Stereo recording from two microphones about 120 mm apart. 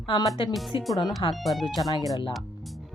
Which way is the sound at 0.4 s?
45° left (ahead or behind).